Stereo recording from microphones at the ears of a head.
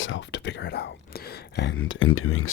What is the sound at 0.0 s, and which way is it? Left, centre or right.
Speech, left.